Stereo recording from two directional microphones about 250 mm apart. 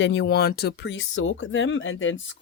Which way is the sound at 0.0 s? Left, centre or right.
Left.